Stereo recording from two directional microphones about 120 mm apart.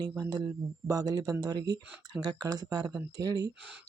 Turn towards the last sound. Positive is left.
turn(degrees=-30)  # may be behind; listen again after turning